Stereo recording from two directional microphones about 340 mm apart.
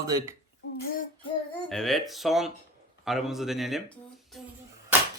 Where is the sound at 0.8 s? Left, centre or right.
Left.